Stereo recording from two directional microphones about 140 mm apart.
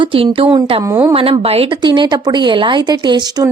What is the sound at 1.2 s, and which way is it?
A woman's voice, 45° right (ahead or behind).